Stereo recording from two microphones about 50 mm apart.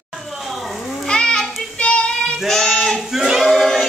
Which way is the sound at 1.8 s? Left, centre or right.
Centre.